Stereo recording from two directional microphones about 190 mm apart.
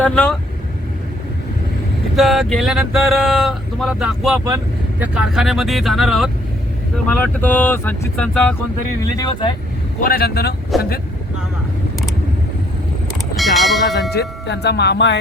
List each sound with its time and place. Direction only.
0.0 s speech: 5° left (ahead or behind)
2.1 s speech: centre (ahead or behind)
9.1 s speech: 25° left (ahead or behind)
10.0 s speech: 50° left (ahead or behind)
13.3 s a sound: centre (ahead or behind)
14.1 s speech: 60° left (ahead or behind)